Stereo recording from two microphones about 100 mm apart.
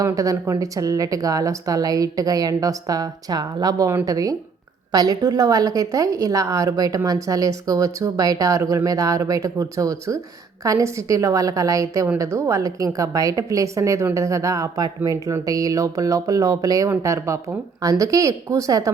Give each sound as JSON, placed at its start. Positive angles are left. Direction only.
{"t": 0.0, "sound": "a woman's voice", "side_deg": -35}